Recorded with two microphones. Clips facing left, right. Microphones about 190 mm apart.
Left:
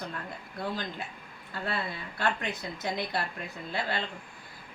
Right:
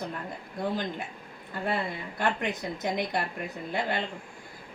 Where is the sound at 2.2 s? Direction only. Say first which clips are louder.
Right 2 dB; 15° right (ahead or behind).